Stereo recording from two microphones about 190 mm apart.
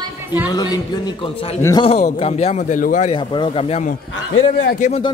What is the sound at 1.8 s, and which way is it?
A man's voice, 30° left (ahead or behind).